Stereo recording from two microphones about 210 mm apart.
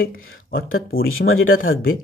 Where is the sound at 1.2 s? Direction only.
75° left (ahead or behind).